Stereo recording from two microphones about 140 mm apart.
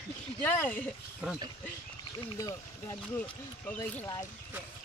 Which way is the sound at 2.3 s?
25° left (ahead or behind).